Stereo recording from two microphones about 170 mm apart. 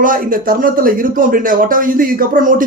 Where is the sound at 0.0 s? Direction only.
55° right (ahead or behind).